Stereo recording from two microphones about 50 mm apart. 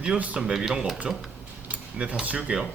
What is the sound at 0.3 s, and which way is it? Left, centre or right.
Speech, centre.